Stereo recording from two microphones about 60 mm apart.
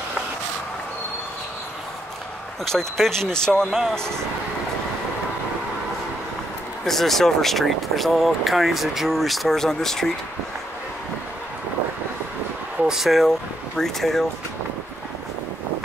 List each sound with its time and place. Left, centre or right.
2.6 s speech: centre
6.9 s speech: centre
12.8 s speech: centre